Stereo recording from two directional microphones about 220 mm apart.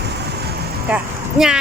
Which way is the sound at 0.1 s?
50° right (ahead or behind).